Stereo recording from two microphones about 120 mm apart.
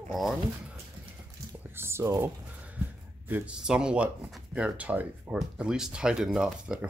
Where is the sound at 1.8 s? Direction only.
20° right (ahead or behind); by 6.9 s 5° right (ahead or behind).